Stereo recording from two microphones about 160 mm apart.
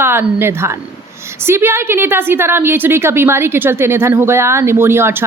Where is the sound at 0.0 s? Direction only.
15° right (ahead or behind).